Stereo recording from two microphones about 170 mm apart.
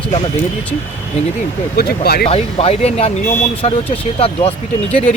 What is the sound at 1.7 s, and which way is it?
Speech, 65° left (ahead or behind).